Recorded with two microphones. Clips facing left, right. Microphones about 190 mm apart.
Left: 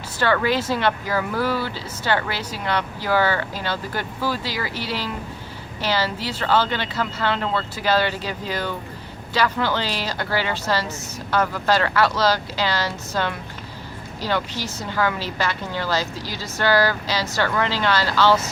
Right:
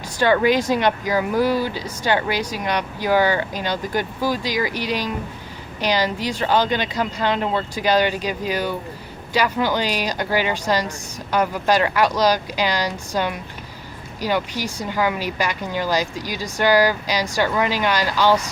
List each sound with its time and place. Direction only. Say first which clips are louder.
0.2 s speech: right 4 dB; 15° right (ahead or behind)